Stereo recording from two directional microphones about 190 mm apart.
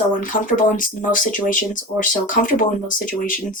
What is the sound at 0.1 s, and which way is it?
Speech, 45° left (ahead or behind).